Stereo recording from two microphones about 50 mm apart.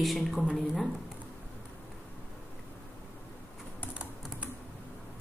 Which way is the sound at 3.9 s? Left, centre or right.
Right.